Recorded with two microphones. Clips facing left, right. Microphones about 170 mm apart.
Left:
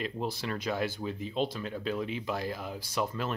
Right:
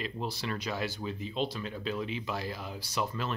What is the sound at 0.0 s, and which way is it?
Speech, 50° left (ahead or behind).